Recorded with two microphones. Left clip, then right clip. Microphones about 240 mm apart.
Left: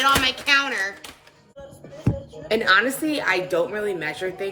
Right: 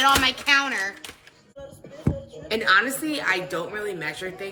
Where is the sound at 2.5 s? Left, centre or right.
Centre.